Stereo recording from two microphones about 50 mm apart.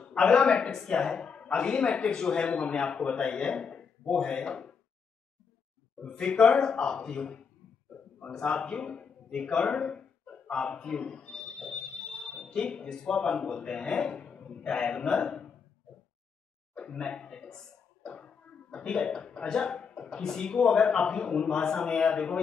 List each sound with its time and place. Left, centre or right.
0.0 s a man's voice: centre
5.9 s a man's voice: centre
10.5 s a sound: left
12.3 s a man's voice: centre
16.7 s a sound: left
20.1 s a man's voice: centre